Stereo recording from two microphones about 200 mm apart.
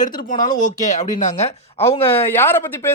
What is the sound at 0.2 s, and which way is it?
Speech, 45° left (ahead or behind).